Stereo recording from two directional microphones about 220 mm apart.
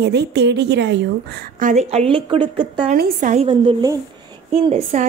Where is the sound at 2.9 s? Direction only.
40° right (ahead or behind).